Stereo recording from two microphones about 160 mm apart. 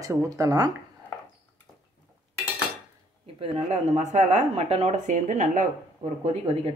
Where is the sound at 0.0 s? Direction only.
20° right (ahead or behind).